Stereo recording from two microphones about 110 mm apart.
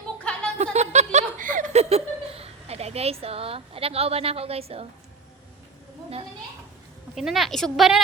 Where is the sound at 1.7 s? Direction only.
75° right (ahead or behind).